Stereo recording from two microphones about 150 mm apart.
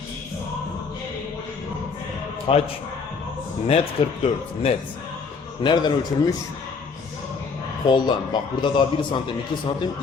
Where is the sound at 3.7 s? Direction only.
45° left (ahead or behind).